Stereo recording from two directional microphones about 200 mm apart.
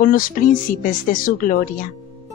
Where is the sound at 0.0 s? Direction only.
45° left (ahead or behind).